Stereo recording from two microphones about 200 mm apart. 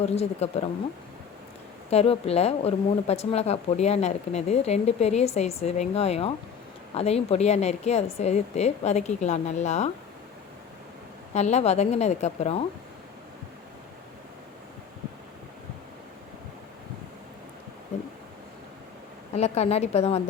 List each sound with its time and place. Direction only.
0.0 s a woman's voice: 30° left (ahead or behind)
1.9 s a woman's voice: 30° left (ahead or behind)
11.3 s a woman's voice: 35° left (ahead or behind)
19.3 s a woman's voice: 30° left (ahead or behind)